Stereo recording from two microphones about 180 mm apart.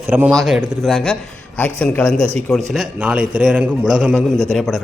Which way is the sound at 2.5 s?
5° right (ahead or behind).